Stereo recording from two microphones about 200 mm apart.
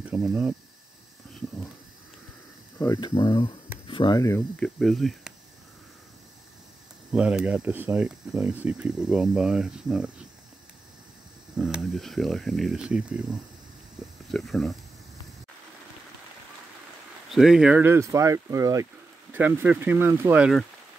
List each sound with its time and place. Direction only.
0.0 s speech: 5° right (ahead or behind)
2.8 s speech: 20° left (ahead or behind)
4.4 s speech: centre (ahead or behind)
7.1 s speech: 5° right (ahead or behind)
11.5 s speech: 5° right (ahead or behind)
17.3 s speech: centre (ahead or behind)